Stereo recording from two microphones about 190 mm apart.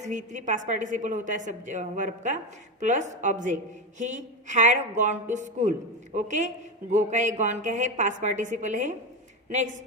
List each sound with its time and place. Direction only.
0.0 s a woman's voice: 40° right (ahead or behind)